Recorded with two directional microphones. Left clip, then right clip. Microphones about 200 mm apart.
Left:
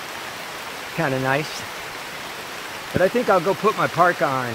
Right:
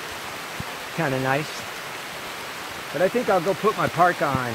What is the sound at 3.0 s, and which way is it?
Speech, 20° left (ahead or behind).